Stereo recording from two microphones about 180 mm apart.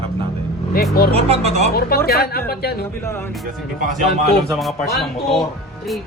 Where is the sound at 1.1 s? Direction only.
35° right (ahead or behind).